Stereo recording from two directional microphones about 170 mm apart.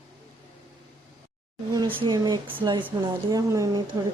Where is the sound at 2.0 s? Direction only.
25° right (ahead or behind).